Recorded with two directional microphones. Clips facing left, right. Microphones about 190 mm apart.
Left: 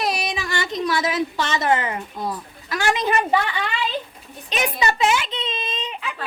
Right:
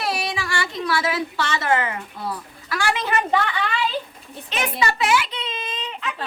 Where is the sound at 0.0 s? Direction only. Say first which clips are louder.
Left 1 dB; 15° left (ahead or behind).